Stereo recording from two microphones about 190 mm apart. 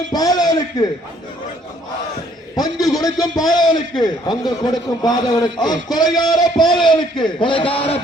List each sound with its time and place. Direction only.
0.1 s a man's voice: 20° left (ahead or behind)
2.6 s a man's voice: 20° left (ahead or behind)